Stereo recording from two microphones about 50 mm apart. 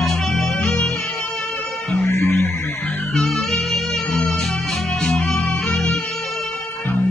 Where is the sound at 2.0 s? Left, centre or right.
Left.